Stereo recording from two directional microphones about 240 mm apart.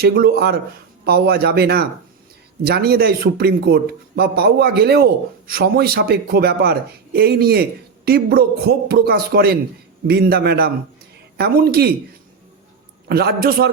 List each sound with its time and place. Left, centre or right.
0.0 s speech: right
13.1 s speech: right